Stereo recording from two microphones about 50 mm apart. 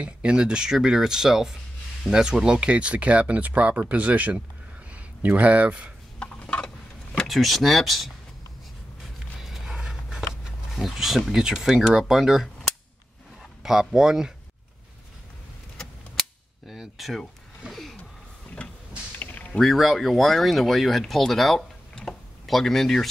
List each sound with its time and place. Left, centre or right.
0.0 s speech: centre
6.1 s a sound: left
7.2 s speech: centre
9.0 s a sound: centre
11.4 s speech: centre
13.6 s speech: centre
16.2 s cap gun: centre
17.6 s a sound: centre
19.6 s speech: centre